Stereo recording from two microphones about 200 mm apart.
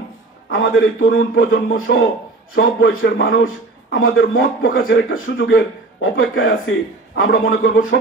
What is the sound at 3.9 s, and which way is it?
Speech, 90° left.